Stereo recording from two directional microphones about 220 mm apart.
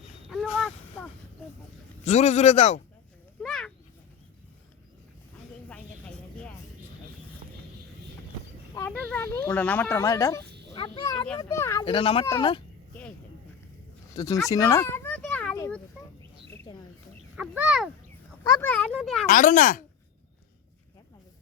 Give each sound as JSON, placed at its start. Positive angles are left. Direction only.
{"t": 0.3, "sound": "a sound", "side_deg": 0}
{"t": 2.0, "sound": "a man's voice", "side_deg": 30}
{"t": 3.4, "sound": "a sound", "side_deg": 0}
{"t": 5.6, "sound": "a sound", "side_deg": 5}
{"t": 8.7, "sound": "speech", "side_deg": 10}
{"t": 10.8, "sound": "a sound", "side_deg": 20}
{"t": 11.3, "sound": "speech", "side_deg": 15}
{"t": 11.9, "sound": "speech", "side_deg": 25}
{"t": 14.2, "sound": "speech", "side_deg": 15}
{"t": 17.3, "sound": "a child's voice", "side_deg": -5}
{"t": 18.4, "sound": "a child's voice", "side_deg": 10}
{"t": 19.3, "sound": "a man's voice", "side_deg": 35}